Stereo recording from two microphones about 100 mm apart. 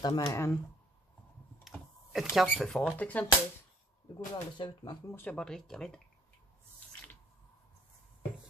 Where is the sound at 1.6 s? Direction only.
Centre (ahead or behind).